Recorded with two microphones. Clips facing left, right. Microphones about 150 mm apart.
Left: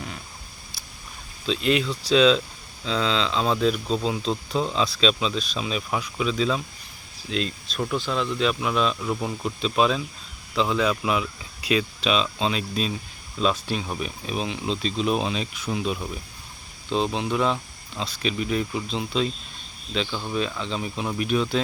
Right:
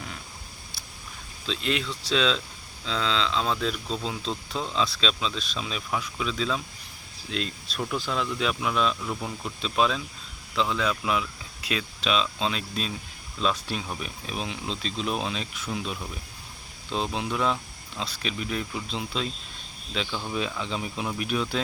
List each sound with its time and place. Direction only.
1.5 s speech: 5° left (ahead or behind)